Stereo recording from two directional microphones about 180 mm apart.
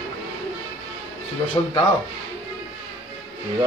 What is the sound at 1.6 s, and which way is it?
Speech, 25° left (ahead or behind).